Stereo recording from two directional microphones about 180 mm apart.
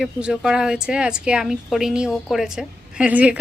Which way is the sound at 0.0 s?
5° right (ahead or behind).